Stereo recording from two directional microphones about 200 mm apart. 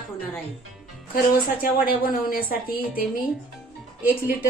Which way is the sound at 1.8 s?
45° left (ahead or behind).